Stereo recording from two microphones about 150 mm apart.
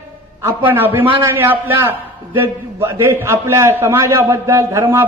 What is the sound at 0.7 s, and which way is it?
A man's voice, 15° right (ahead or behind).